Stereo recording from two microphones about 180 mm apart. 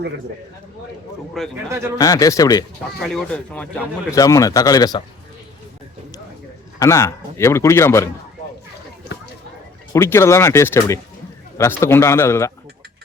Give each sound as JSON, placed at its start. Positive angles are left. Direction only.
{"t": 1.4, "sound": "speech", "side_deg": 0}
{"t": 2.0, "sound": "speech", "side_deg": 20}
{"t": 3.0, "sound": "speech", "side_deg": 0}
{"t": 4.1, "sound": "speech", "side_deg": 20}
{"t": 6.7, "sound": "a man's voice", "side_deg": 15}
{"t": 9.9, "sound": "a man's voice", "side_deg": 15}